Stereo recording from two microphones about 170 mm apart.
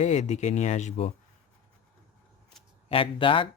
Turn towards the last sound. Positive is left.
turn(degrees=30)  # may be behind; listen again after turning